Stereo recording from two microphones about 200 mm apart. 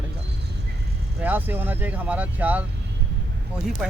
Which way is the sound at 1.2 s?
10° right (ahead or behind).